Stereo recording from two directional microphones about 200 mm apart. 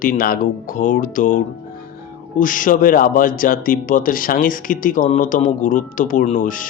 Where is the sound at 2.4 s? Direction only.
40° left (ahead or behind).